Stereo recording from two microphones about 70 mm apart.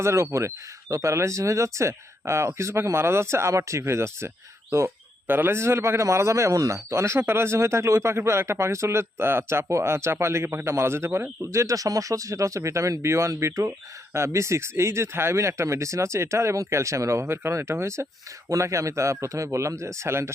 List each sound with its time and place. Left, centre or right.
0.0 s speech: right
5.3 s speech: right